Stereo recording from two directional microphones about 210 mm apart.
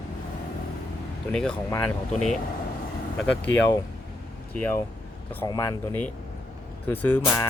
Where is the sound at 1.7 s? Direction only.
15° left (ahead or behind).